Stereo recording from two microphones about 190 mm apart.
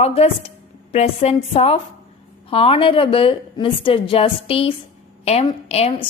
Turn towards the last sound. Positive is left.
turn(degrees=30)  # may be behind; listen again after turning